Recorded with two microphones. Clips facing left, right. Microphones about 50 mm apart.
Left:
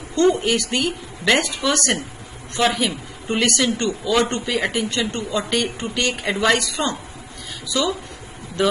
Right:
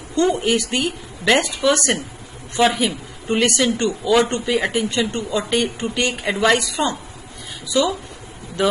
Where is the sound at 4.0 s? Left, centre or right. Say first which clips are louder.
Right 4 dB; centre.